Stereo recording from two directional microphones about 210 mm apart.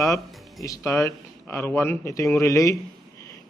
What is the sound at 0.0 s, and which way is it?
Speech, 15° left (ahead or behind).